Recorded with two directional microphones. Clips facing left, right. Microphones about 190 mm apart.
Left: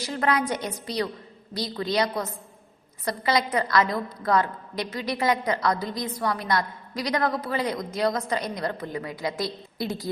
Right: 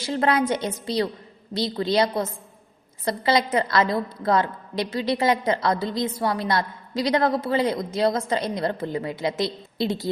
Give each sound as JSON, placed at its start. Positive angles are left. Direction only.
{"t": 0.0, "sound": "a woman's voice", "side_deg": -30}